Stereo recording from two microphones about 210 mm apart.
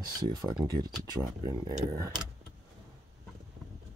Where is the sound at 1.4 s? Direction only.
20° right (ahead or behind).